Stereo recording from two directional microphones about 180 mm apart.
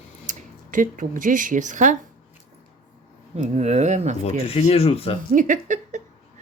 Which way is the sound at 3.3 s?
35° right (ahead or behind).